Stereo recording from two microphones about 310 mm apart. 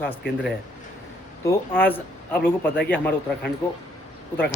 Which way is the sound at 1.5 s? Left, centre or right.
Centre.